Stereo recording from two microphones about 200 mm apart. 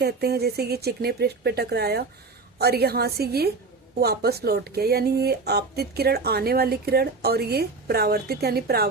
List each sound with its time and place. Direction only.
0.0 s speech: 55° right (ahead or behind)